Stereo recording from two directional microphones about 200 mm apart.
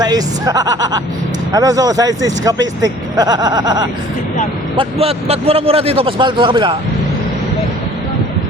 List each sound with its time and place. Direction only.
0.0 s speech: 20° right (ahead or behind)